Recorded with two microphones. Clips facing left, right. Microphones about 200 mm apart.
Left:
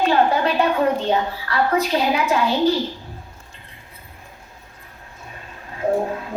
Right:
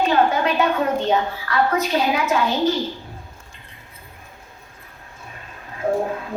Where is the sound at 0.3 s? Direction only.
30° left (ahead or behind).